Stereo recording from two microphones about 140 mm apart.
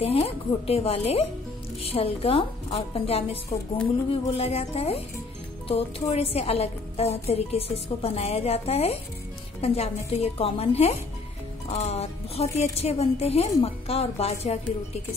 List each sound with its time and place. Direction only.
0.0 s a woman's voice: 45° left (ahead or behind)